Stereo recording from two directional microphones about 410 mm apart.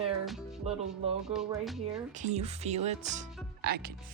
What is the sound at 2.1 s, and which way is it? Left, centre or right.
Speech, centre.